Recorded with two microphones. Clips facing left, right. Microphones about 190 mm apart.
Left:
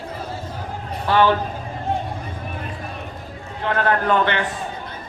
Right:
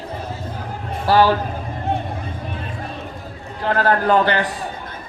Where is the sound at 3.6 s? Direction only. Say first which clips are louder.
Right 2 dB; 35° right (ahead or behind).